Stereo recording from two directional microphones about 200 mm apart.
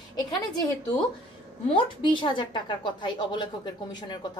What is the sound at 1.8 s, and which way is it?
A woman's voice, 25° left (ahead or behind).